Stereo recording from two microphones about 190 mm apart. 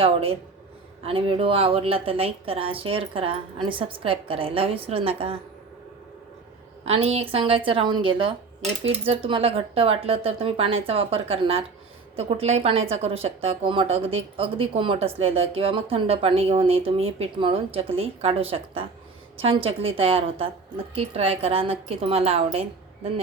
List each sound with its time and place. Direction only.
0.0 s a woman's voice: 30° right (ahead or behind)
6.8 s a woman's voice: 30° right (ahead or behind)